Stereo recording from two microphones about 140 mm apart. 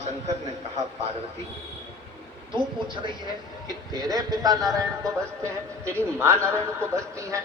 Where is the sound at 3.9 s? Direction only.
25° right (ahead or behind).